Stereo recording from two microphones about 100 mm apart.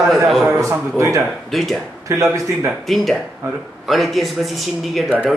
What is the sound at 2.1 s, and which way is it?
Speech, 30° right (ahead or behind).